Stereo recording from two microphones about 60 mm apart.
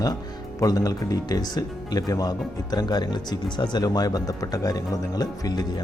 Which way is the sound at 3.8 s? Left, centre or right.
Left.